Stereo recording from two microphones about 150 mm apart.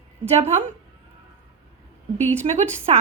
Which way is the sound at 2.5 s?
50° right (ahead or behind).